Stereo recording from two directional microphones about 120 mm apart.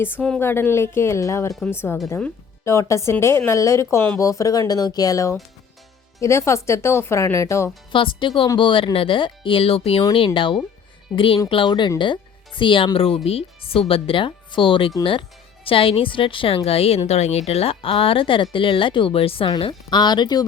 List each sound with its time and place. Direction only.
0.3 s speech: 20° left (ahead or behind)
7.9 s a woman's voice: 45° left (ahead or behind)
19.6 s speech: 40° left (ahead or behind)